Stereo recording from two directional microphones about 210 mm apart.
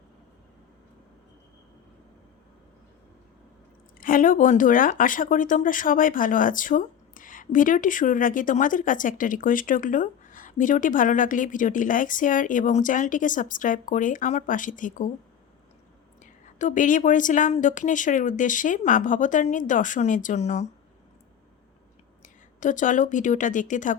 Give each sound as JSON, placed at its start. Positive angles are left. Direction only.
{"t": 4.0, "sound": "speech", "side_deg": 40}
{"t": 16.2, "sound": "speech", "side_deg": 40}
{"t": 22.2, "sound": "speech", "side_deg": 35}